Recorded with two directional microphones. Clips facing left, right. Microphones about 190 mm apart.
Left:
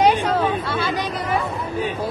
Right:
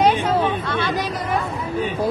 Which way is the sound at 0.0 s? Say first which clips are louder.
Even; 5° right (ahead or behind).